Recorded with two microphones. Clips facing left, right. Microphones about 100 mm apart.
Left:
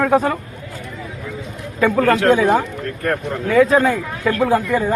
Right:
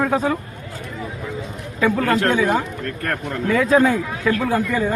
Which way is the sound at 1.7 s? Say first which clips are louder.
Left 3 dB; centre (ahead or behind).